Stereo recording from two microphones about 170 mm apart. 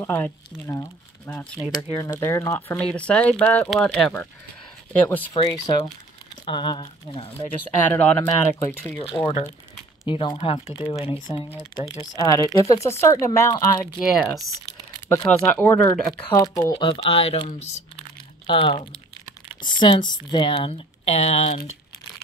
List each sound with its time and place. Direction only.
0.0 s speech: 15° left (ahead or behind)
1.8 s speech: 20° left (ahead or behind)
2.8 s speech: 5° left (ahead or behind)
5.0 s speech: 10° left (ahead or behind)
5.5 s speech: 25° left (ahead or behind)
7.9 s speech: 10° left (ahead or behind)
9.0 s speech: 25° left (ahead or behind)
13.9 s speech: centre (ahead or behind); by 16.7 s 20° left (ahead or behind)
16.7 s speech: 35° left (ahead or behind)